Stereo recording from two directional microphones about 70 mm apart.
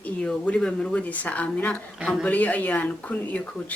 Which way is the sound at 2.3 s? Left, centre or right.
Left.